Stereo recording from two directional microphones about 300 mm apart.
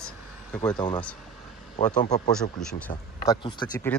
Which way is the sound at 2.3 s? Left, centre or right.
Centre.